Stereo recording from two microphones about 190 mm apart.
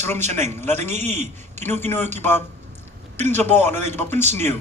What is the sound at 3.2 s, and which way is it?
Speech, 10° left (ahead or behind).